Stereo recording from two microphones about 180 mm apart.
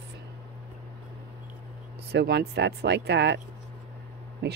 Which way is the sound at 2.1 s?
65° right (ahead or behind).